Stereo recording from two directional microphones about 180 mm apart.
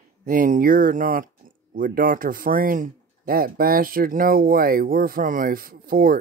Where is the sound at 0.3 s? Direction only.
45° right (ahead or behind).